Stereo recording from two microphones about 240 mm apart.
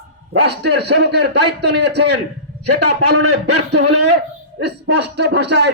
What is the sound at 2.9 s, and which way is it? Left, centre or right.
Speech, right.